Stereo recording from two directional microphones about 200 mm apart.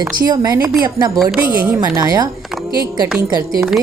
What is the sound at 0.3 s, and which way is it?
A woman's voice, 20° right (ahead or behind).